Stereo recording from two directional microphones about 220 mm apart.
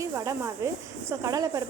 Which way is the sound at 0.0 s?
15° right (ahead or behind).